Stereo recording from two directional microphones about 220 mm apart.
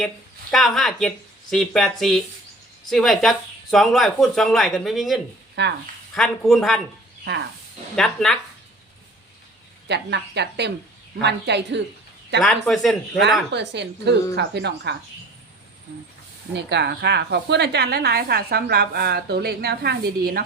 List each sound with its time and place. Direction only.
0.5 s speech: centre (ahead or behind)
5.6 s a woman's voice: 50° right (ahead or behind)
6.1 s speech: centre (ahead or behind)
7.9 s speech: centre (ahead or behind)
9.9 s a woman's voice: 50° right (ahead or behind)
12.6 s speech: centre (ahead or behind)
13.5 s a woman's voice: 50° right (ahead or behind)
16.6 s a woman's voice: 50° right (ahead or behind)